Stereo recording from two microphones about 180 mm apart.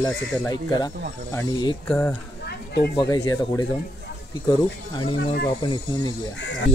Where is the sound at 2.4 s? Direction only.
65° left (ahead or behind).